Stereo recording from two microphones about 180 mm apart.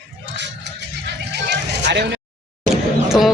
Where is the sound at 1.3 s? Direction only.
70° right (ahead or behind).